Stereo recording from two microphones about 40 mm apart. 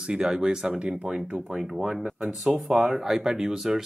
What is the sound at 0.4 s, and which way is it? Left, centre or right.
Speech, centre.